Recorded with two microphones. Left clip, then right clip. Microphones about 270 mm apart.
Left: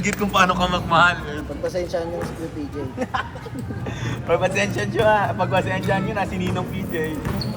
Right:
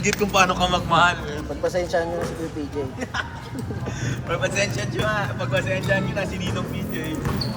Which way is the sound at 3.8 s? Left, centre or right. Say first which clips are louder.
Left 5 dB; centre.